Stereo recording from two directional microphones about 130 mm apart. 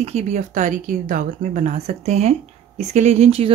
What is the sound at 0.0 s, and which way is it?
Speech, 60° right (ahead or behind).